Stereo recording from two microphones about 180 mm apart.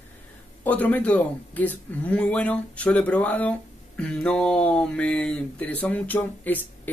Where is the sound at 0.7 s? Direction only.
10° left (ahead or behind).